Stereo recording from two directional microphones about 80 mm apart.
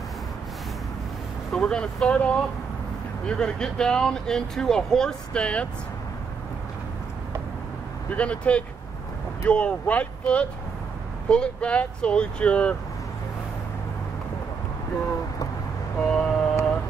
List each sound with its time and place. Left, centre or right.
1.5 s speech: centre
8.2 s speech: centre
16.1 s vehicle: centre